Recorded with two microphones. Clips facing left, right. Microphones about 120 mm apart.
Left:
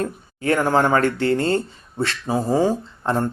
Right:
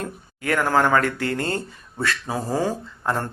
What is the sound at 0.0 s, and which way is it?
Speech, 30° left (ahead or behind).